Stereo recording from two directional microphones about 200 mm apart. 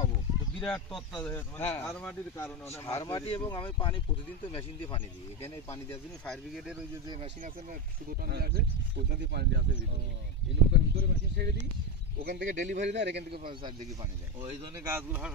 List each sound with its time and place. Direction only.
0.6 s speech: 5° left (ahead or behind); by 4.0 s 25° left (ahead or behind)
5.9 s speech: 5° left (ahead or behind)
8.2 s speech: 50° right (ahead or behind)
10.7 s speech: 55° right (ahead or behind); by 12.9 s 35° right (ahead or behind)
12.9 s speech: 60° right (ahead or behind)
13.5 s speech: 25° right (ahead or behind)
14.8 s speech: 10° right (ahead or behind)